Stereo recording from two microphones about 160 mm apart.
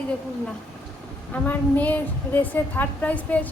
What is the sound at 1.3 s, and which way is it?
A woman's voice, 10° left (ahead or behind).